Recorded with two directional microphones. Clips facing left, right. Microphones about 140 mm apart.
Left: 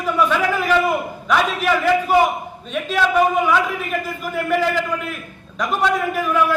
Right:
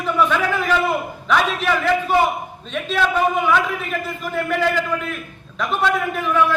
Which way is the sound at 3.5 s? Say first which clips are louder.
Even; 10° left (ahead or behind).